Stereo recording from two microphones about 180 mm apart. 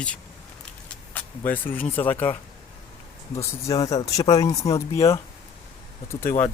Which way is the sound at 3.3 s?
20° left (ahead or behind).